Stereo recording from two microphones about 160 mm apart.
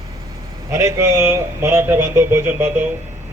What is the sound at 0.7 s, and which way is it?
Speech, 20° right (ahead or behind).